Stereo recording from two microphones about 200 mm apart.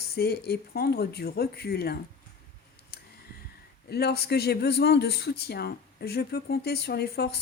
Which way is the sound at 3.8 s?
55° left (ahead or behind).